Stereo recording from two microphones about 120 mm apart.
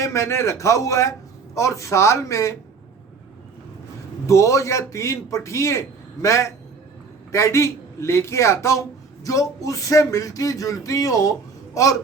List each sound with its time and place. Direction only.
0.0 s speech: 25° left (ahead or behind)
4.3 s speech: 25° left (ahead or behind)